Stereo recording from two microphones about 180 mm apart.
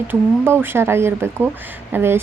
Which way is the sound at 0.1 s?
10° right (ahead or behind).